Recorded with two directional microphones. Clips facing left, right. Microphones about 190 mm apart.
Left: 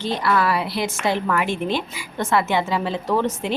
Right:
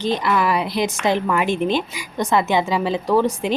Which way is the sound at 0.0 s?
15° right (ahead or behind).